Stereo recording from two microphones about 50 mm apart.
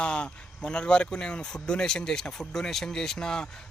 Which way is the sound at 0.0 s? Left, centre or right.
Left.